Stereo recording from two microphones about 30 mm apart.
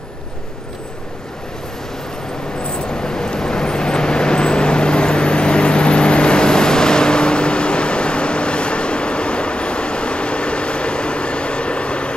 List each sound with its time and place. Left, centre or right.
2.9 s vehicle: left